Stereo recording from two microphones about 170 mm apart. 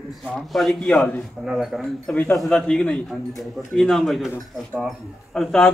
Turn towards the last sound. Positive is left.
turn(degrees=5)  # may be behind; listen again after turning